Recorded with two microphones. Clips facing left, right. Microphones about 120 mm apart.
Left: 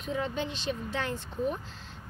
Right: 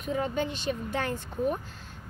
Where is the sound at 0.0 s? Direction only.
50° right (ahead or behind).